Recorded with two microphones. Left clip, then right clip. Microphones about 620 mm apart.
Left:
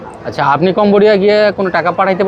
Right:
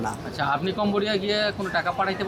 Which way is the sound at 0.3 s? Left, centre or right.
Left.